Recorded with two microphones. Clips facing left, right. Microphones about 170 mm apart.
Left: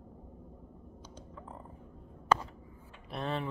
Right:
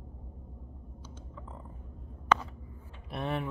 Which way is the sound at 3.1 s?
10° right (ahead or behind).